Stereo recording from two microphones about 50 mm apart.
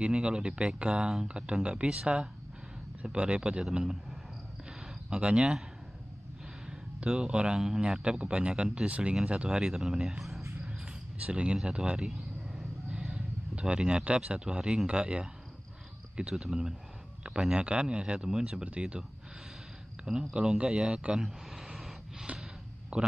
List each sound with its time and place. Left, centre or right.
0.1 s speech: centre
3.7 s a man's voice: centre
7.1 s speech: centre
9.5 s speech: centre
11.2 s speech: centre
12.0 s a sound: centre
13.0 s speech: right
20.1 s speech: centre
21.1 s a sound: centre
22.9 s a man's voice: right